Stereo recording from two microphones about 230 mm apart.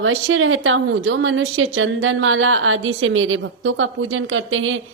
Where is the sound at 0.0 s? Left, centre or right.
Right.